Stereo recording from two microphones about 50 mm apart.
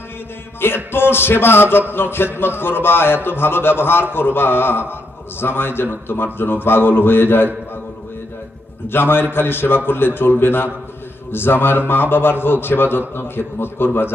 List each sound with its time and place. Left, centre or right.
0.9 s a man's voice: left
8.9 s a man's voice: left